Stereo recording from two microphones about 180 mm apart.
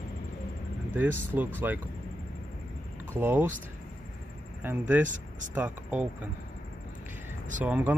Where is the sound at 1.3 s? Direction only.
10° right (ahead or behind).